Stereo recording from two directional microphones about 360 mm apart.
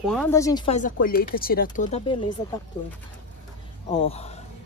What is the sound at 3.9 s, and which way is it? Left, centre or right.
Speech, centre.